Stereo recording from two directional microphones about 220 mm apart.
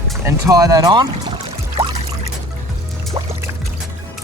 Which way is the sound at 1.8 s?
30° right (ahead or behind).